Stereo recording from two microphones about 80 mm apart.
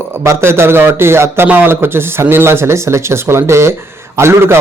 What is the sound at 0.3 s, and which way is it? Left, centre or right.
Speech, right.